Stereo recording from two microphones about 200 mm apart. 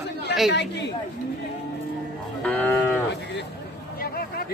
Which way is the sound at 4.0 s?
50° left (ahead or behind).